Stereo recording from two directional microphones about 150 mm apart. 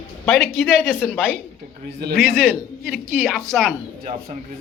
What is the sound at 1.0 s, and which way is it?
Speech, 5° right (ahead or behind).